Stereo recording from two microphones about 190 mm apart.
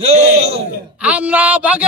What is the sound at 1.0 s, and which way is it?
Speech, 5° right (ahead or behind).